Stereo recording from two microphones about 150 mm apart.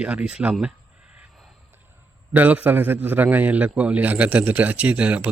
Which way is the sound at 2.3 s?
10° right (ahead or behind).